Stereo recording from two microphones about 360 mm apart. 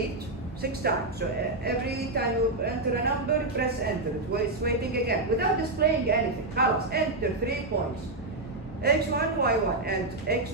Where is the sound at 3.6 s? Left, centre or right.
Right.